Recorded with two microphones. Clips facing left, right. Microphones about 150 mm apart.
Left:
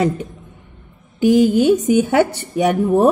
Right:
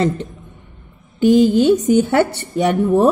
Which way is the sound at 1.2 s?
10° left (ahead or behind).